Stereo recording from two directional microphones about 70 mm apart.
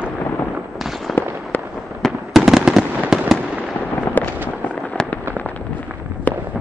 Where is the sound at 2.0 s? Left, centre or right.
Centre.